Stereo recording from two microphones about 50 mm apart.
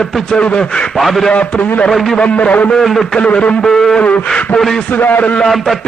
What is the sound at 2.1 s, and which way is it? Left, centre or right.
Speech, left.